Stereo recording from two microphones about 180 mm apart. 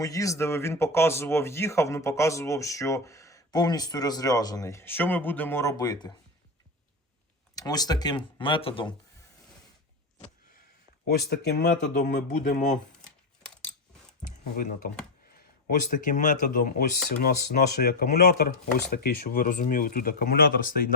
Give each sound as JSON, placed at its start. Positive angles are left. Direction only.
{"t": 0.0, "sound": "speech", "side_deg": 20}
{"t": 7.5, "sound": "speech", "side_deg": 20}
{"t": 11.1, "sound": "speech", "side_deg": 65}
{"t": 12.0, "sound": "speech", "side_deg": 45}
{"t": 14.5, "sound": "speech", "side_deg": 50}
{"t": 15.9, "sound": "speech", "side_deg": 45}
{"t": 17.2, "sound": "speech", "side_deg": 60}